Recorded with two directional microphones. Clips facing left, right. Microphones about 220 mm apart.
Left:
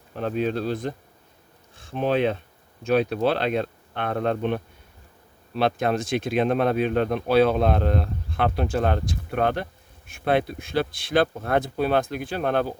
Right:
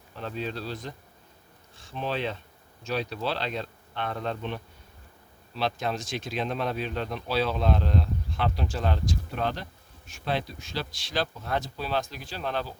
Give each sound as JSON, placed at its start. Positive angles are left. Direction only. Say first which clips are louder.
{"t": 0.1, "sound": "speech", "louder": "left 9 dB", "side_deg": 55}